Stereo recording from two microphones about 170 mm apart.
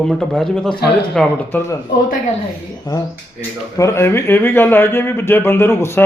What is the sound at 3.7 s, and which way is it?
Speech, 15° left (ahead or behind).